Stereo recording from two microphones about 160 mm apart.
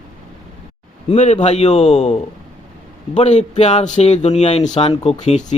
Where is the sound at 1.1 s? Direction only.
45° left (ahead or behind).